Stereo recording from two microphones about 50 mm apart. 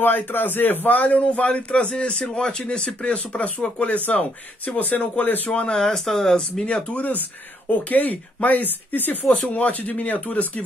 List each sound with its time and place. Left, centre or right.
0.0 s a man's voice: left
5.5 s a man's voice: left
5.8 s speech: centre
7.9 s speech: left